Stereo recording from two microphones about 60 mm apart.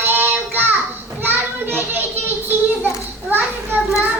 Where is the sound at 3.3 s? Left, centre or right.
Right.